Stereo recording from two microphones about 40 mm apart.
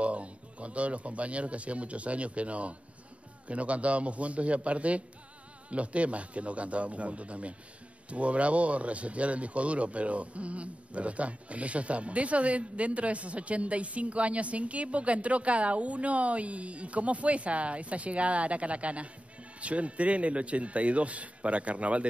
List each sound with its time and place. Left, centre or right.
0.0 s speech: right